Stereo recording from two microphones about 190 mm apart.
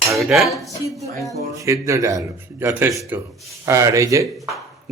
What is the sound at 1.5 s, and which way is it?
A man's voice, 15° right (ahead or behind).